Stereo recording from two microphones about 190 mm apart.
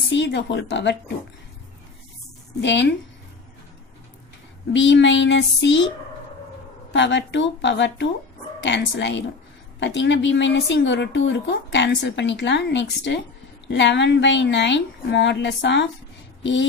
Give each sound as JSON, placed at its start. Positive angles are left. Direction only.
{"t": 0.1, "sound": "a woman's voice", "side_deg": 70}
{"t": 2.6, "sound": "a woman's voice", "side_deg": 70}
{"t": 4.7, "sound": "a woman's voice", "side_deg": 70}
{"t": 6.9, "sound": "a woman's voice", "side_deg": 70}